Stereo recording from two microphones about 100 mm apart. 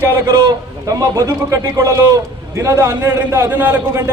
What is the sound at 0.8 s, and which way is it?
A man's voice, 35° right (ahead or behind).